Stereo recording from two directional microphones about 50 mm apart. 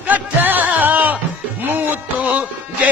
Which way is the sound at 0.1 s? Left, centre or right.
Right.